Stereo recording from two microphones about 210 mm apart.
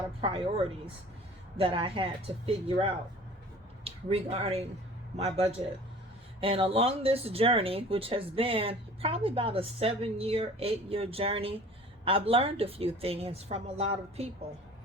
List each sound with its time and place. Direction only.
1.5 s speech: 25° right (ahead or behind)